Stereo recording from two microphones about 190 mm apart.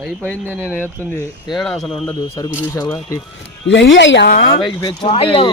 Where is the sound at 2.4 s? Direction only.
20° left (ahead or behind).